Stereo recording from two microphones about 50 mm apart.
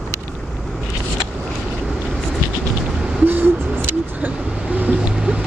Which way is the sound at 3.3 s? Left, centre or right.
Right.